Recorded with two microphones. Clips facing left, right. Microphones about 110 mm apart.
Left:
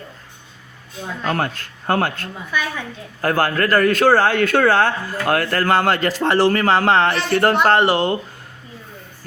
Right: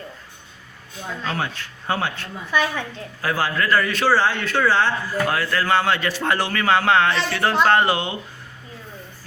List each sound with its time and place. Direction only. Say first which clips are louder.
1.2 s a man's voice: left 5 dB; 50° left (ahead or behind); by 7.3 s 35° left (ahead or behind)
7.3 s a man's voice: left 3 dB; 45° left (ahead or behind)
7.8 s speech: left 3 dB; 30° left (ahead or behind)